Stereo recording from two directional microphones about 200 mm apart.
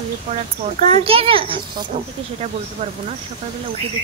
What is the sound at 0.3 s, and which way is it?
A woman's voice, 35° right (ahead or behind).